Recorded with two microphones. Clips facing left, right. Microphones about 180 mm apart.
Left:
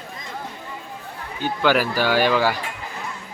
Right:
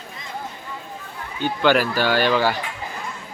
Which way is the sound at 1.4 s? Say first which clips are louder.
Right 1 dB; 5° left (ahead or behind).